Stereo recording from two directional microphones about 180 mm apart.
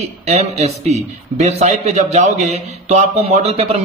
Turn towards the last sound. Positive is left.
turn(degrees=-35)  # may be behind; listen again after turning